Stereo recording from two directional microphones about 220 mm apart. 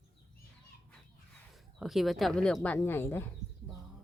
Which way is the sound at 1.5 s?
Centre (ahead or behind).